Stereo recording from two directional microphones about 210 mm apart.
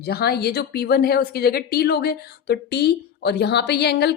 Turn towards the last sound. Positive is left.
turn(degrees=50)  # may be behind; listen again after turning